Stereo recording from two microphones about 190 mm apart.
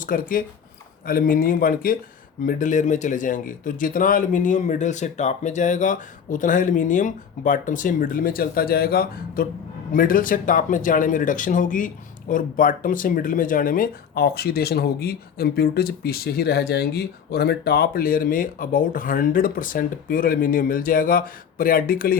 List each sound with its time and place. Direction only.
0.0 s speech: 45° left (ahead or behind)